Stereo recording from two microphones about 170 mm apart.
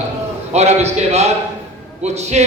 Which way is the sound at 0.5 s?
40° right (ahead or behind).